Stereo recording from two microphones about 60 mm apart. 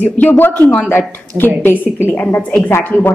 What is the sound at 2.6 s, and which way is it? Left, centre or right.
Speech, left.